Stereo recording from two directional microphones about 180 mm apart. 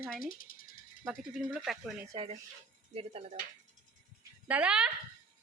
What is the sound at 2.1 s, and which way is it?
Speech, 35° right (ahead or behind).